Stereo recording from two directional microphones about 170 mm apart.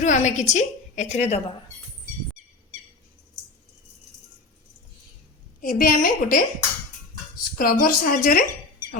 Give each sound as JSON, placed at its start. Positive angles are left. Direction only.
{"t": 0.0, "sound": "a woman's voice", "side_deg": 45}
{"t": 5.6, "sound": "a woman's voice", "side_deg": 55}
{"t": 7.6, "sound": "a woman's voice", "side_deg": 55}